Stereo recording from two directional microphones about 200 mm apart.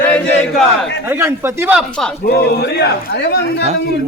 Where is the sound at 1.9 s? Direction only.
5° left (ahead or behind).